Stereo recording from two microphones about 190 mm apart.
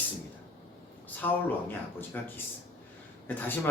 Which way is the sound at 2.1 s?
10° left (ahead or behind).